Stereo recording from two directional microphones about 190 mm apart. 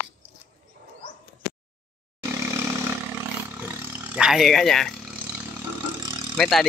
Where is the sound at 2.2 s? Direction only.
15° right (ahead or behind); by 4.9 s centre (ahead or behind).